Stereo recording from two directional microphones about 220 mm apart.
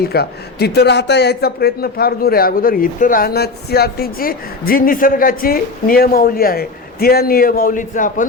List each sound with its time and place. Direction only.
0.0 s a man's voice: 45° left (ahead or behind)